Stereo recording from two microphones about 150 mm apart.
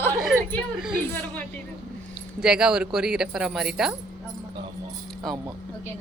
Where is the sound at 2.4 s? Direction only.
5° right (ahead or behind).